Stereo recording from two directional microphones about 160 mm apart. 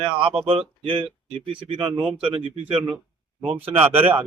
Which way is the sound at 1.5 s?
35° right (ahead or behind).